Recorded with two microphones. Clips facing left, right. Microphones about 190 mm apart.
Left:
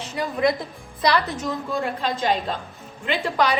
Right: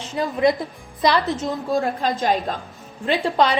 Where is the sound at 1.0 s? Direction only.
20° right (ahead or behind).